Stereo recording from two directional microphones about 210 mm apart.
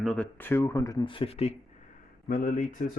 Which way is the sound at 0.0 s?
5° left (ahead or behind).